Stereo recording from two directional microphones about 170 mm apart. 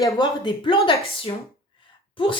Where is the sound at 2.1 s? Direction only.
30° left (ahead or behind).